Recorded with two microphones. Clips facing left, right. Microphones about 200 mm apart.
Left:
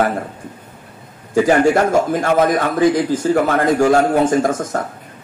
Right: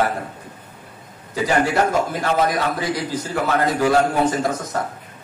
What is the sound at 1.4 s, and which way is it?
A man's voice, 50° left (ahead or behind).